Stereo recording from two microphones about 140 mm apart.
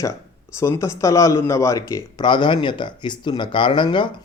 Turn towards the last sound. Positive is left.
turn(degrees=35)  # may be behind; listen again after turning